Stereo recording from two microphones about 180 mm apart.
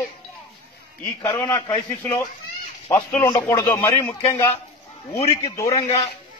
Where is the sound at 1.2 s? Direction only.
15° left (ahead or behind).